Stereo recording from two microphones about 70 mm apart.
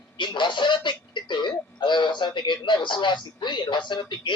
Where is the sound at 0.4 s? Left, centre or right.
Left.